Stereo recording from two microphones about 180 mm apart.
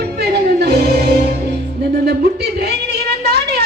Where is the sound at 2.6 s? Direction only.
65° right (ahead or behind).